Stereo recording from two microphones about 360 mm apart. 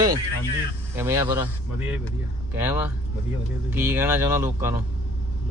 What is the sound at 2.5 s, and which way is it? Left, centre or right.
Speech, centre.